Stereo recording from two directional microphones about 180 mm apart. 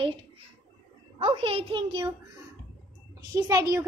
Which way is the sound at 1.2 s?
35° right (ahead or behind).